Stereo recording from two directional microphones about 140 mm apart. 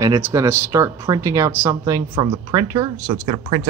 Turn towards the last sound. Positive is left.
turn(degrees=-35)  # may be behind; listen again after turning